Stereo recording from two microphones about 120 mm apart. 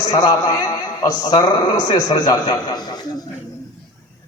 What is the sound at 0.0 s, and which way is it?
Speech, 30° left (ahead or behind).